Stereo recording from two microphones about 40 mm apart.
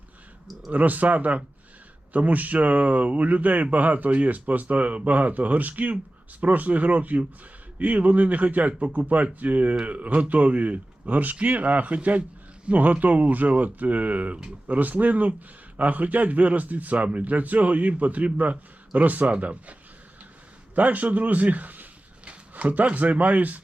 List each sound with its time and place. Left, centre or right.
0.7 s speech: right
20.7 s speech: right
22.2 s speech: right